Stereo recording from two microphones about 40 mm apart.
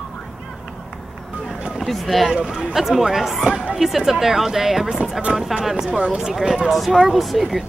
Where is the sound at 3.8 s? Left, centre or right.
Centre.